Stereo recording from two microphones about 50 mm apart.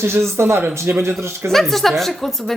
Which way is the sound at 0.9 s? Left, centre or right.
Right.